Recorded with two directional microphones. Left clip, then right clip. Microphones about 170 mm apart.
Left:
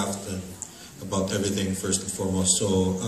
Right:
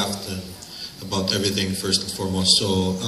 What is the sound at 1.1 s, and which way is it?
A man's voice, 35° left (ahead or behind).